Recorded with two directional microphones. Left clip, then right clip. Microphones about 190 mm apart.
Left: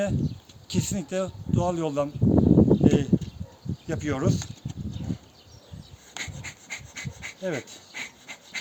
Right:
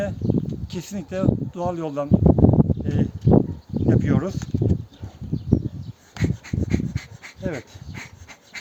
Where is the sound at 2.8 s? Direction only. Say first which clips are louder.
Left 5 dB; 5° left (ahead or behind).